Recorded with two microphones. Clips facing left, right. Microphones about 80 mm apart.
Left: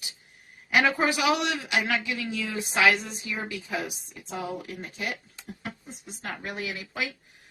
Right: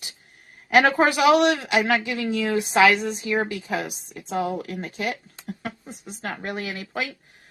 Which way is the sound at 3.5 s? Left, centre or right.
Right.